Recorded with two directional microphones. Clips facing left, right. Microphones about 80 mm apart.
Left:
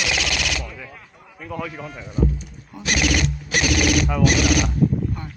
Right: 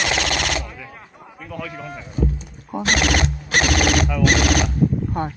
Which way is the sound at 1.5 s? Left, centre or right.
Centre.